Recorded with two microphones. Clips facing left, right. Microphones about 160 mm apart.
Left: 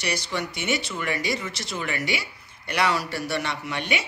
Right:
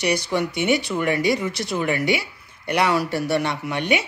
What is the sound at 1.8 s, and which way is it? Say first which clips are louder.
Speech: right 7 dB; 15° right (ahead or behind).